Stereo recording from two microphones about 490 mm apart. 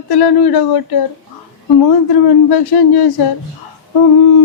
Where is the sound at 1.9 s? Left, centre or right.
Left.